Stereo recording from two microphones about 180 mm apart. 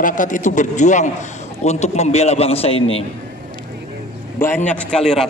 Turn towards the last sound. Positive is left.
turn(degrees=5)  # may be behind; listen again after turning